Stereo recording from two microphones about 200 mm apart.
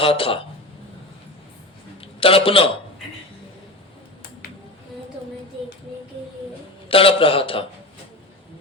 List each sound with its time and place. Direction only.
0.0 s a man's voice: 25° left (ahead or behind)
2.2 s a man's voice: 25° left (ahead or behind)
6.8 s a man's voice: 25° left (ahead or behind)